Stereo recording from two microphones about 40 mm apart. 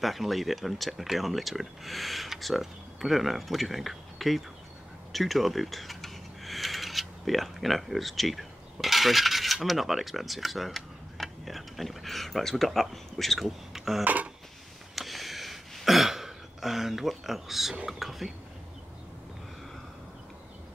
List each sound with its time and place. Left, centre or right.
0.0 s speech: centre
13.7 s a sound: centre
14.0 s drawer open or close: right
15.0 s a sound: centre
15.8 s throat clearing: centre
17.1 s speech: centre